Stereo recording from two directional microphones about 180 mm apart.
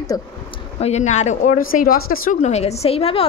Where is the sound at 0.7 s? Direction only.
40° left (ahead or behind); by 2.5 s 55° left (ahead or behind).